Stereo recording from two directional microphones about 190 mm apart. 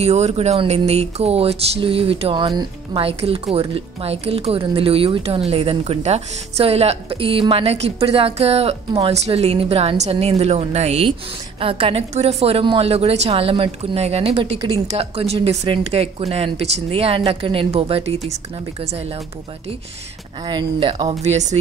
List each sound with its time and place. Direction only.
0.0 s speech: 35° right (ahead or behind)
20.4 s speech: 25° right (ahead or behind)